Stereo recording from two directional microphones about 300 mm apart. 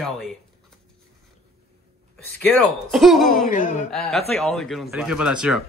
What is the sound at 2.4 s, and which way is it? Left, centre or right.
Speech, centre.